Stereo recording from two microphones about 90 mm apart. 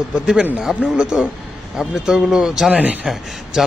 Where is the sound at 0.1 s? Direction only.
10° right (ahead or behind).